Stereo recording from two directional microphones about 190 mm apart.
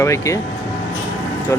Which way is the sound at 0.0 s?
15° left (ahead or behind).